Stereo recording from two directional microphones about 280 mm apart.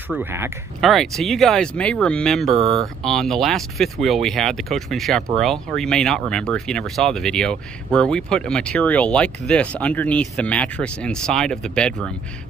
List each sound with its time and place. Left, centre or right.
0.1 s speech: centre
2.5 s speech: right
2.8 s speech: centre